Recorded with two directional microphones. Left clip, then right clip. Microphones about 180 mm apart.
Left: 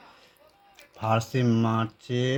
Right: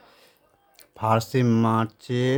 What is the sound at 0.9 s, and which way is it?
Speech, 35° right (ahead or behind).